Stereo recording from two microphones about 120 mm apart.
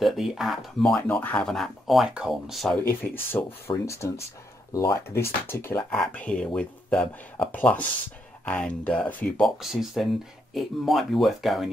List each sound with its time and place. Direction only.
0.0 s speech: centre (ahead or behind)
2.9 s speech: 20° left (ahead or behind)
5.9 s speech: 10° left (ahead or behind)
9.6 s speech: 5° right (ahead or behind)